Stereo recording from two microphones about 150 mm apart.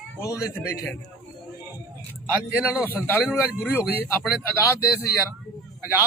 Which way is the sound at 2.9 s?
10° left (ahead or behind).